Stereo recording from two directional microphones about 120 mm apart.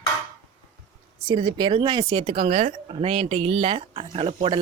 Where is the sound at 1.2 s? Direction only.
40° right (ahead or behind).